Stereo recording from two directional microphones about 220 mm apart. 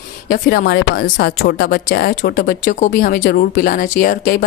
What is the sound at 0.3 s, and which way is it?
Speech, 40° left (ahead or behind).